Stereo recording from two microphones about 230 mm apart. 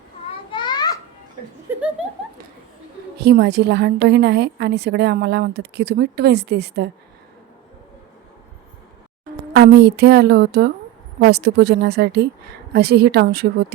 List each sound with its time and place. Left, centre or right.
0.5 s children playing: centre
1.7 s chuckle: centre
3.2 s a woman's voice: right
9.5 s a woman's voice: right